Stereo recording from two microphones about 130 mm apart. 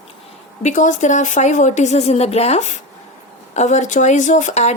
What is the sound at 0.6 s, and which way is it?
A woman's voice, 75° left (ahead or behind).